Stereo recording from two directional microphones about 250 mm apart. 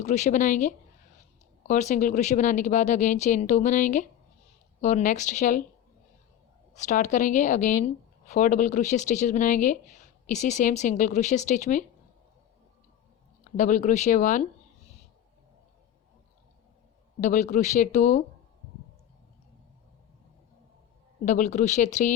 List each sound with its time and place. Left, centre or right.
0.0 s speech: left
6.7 s speech: left
13.6 s speech: left
17.2 s speech: left
21.2 s speech: left